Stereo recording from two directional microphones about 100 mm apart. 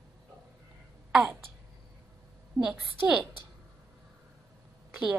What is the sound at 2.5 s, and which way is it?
Speech, 5° right (ahead or behind).